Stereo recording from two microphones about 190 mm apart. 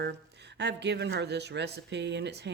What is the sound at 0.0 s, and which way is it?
Speech, 65° right (ahead or behind).